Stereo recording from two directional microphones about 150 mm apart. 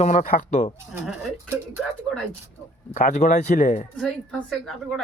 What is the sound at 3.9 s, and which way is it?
A woman's voice, 5° left (ahead or behind).